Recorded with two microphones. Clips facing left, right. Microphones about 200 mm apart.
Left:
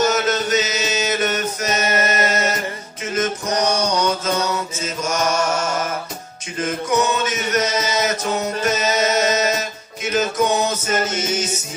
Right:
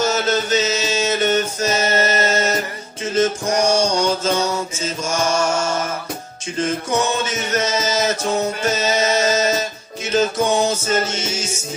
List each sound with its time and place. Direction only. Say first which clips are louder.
0.0 s music: even; 30° right (ahead or behind)
3.2 s mantra: right 3 dB; 30° right (ahead or behind)
6.6 s music: even; 30° right (ahead or behind)
10.1 s mantra: right 1 dB; 30° right (ahead or behind)